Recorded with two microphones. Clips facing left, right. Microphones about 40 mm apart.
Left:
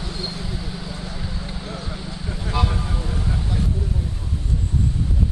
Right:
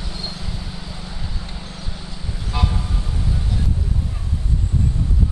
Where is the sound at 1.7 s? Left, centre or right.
Centre.